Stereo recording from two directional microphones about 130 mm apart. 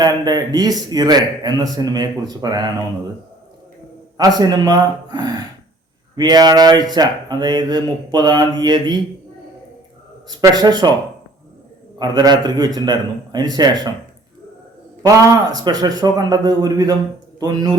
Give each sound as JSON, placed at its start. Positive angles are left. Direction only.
{"t": 0.0, "sound": "a man's voice", "side_deg": -30}
{"t": 4.2, "sound": "a man's voice", "side_deg": -30}
{"t": 10.2, "sound": "a man's voice", "side_deg": -30}
{"t": 11.9, "sound": "a man's voice", "side_deg": -35}
{"t": 15.5, "sound": "a man's voice", "side_deg": -30}